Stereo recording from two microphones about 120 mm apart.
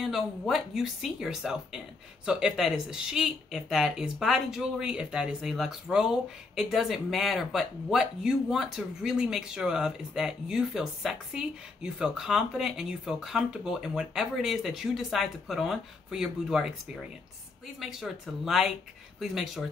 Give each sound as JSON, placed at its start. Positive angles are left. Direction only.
{"t": 0.0, "sound": "speech", "side_deg": 0}